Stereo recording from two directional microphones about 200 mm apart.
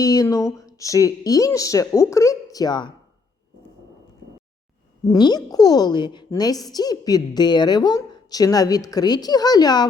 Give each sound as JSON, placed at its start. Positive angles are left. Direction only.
{"t": 0.0, "sound": "speech", "side_deg": 15}
{"t": 5.0, "sound": "a woman's voice", "side_deg": 20}